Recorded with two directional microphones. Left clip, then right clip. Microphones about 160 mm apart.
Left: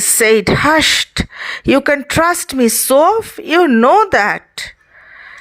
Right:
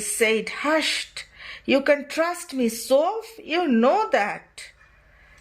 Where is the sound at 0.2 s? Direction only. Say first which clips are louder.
Left 11 dB; 35° left (ahead or behind).